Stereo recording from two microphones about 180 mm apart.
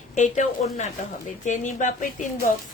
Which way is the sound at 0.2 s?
45° left (ahead or behind).